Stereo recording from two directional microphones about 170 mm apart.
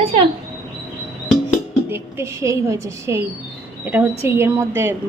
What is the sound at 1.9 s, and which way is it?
A woman's voice, 15° right (ahead or behind).